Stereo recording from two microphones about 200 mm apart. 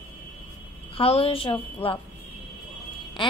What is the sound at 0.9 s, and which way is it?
A woman's voice, 30° left (ahead or behind).